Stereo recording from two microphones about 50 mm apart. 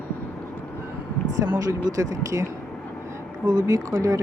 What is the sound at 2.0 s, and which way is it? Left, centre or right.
Speech, right.